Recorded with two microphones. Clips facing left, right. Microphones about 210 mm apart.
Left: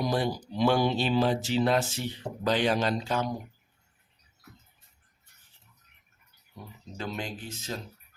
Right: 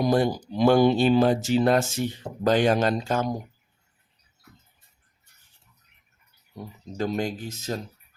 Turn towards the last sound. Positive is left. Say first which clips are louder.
# right 5 dB
turn(degrees=-40)  # may be behind; listen again after turning